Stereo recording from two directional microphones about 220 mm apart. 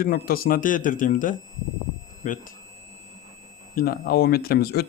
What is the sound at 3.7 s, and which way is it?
Speech, 40° left (ahead or behind).